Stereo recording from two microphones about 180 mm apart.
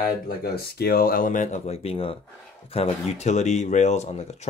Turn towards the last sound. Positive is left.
turn(degrees=40)  # may be behind; listen again after turning